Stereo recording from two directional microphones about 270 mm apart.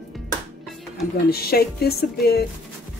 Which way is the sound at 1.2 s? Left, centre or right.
Left.